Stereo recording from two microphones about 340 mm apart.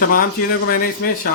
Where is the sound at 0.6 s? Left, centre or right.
Left.